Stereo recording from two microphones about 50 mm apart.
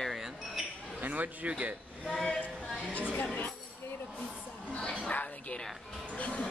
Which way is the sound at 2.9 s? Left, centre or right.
Left.